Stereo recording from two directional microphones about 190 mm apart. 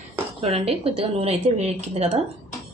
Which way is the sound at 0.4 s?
30° right (ahead or behind).